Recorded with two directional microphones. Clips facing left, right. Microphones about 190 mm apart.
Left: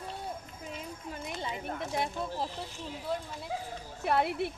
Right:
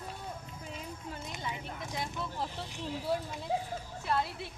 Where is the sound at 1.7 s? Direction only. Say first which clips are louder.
Left 6 dB; 55° left (ahead or behind).